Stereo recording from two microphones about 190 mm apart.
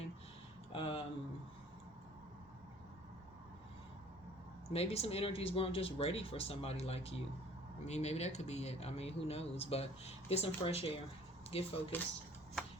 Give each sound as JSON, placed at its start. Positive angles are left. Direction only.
{"t": 0.7, "sound": "a sound", "side_deg": 30}
{"t": 4.7, "sound": "speech", "side_deg": 30}
{"t": 11.9, "sound": "speech", "side_deg": 10}